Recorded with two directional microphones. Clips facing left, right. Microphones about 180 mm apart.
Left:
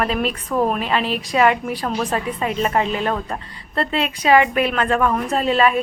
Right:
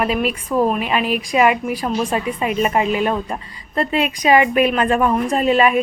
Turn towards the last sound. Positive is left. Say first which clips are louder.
# right 2 dB
turn(degrees=-15)  # may be behind; listen again after turning